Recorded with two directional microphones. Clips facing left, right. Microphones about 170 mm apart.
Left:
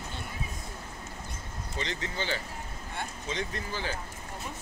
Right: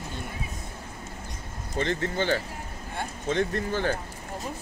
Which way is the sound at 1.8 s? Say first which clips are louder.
Right 8 dB; 50° right (ahead or behind).